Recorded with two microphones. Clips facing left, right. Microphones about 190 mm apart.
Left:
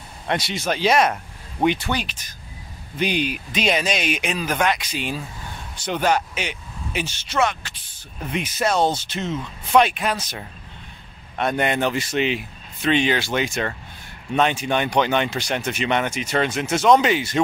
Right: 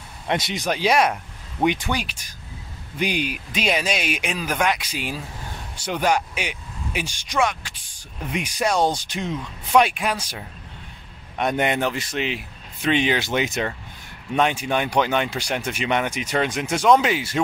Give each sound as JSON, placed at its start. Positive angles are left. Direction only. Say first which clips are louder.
{"t": 0.3, "sound": "speech", "louder": "even", "side_deg": -15}
{"t": 11.8, "sound": "speech", "louder": "left 3 dB", "side_deg": 0}
{"t": 12.8, "sound": "speech", "louder": "left 1 dB", "side_deg": -15}